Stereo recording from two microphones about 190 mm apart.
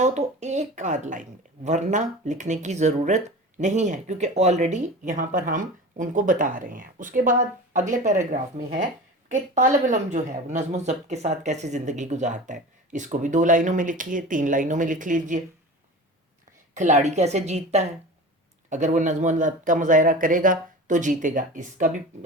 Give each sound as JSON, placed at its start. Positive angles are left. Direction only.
{"t": 0.0, "sound": "speech", "side_deg": -35}
{"t": 16.7, "sound": "speech", "side_deg": -40}